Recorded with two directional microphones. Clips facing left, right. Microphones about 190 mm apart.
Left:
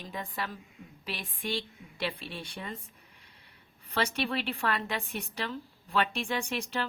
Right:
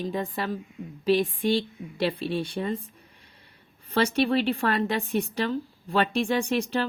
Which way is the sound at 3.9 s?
35° right (ahead or behind).